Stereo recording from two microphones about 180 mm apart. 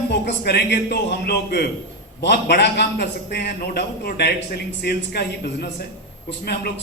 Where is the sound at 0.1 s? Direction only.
65° left (ahead or behind).